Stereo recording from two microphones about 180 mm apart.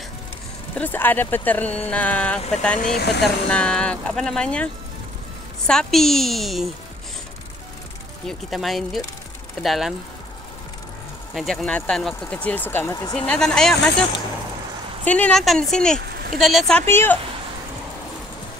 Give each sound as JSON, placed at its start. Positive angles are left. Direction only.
{"t": 0.7, "sound": "speech", "side_deg": 10}
{"t": 2.8, "sound": "speech", "side_deg": 60}
{"t": 3.4, "sound": "speech", "side_deg": 5}
{"t": 5.7, "sound": "speech", "side_deg": 5}
{"t": 8.3, "sound": "speech", "side_deg": 0}
{"t": 11.3, "sound": "speech", "side_deg": 5}
{"t": 15.0, "sound": "speech", "side_deg": 10}
{"t": 16.8, "sound": "speech", "side_deg": 15}